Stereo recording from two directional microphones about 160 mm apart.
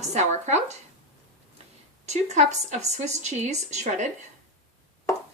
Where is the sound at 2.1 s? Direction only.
45° right (ahead or behind).